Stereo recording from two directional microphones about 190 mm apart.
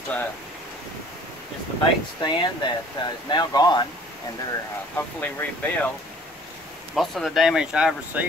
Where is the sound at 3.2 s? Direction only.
20° left (ahead or behind).